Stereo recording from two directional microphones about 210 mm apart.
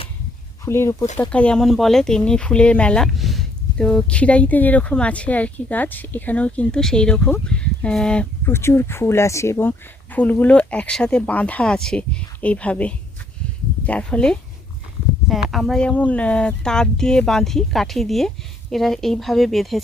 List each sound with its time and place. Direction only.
0.6 s speech: 10° left (ahead or behind)